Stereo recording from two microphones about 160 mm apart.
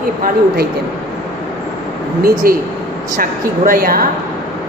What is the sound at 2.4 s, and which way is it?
A man's voice, 65° right (ahead or behind).